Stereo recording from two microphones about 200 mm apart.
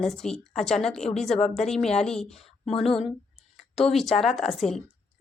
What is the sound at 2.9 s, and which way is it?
Speech, 25° left (ahead or behind).